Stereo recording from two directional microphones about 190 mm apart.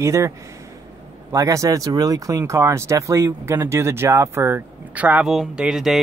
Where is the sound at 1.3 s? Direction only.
15° right (ahead or behind).